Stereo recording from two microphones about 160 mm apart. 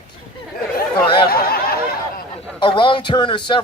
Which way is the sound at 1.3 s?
70° left (ahead or behind).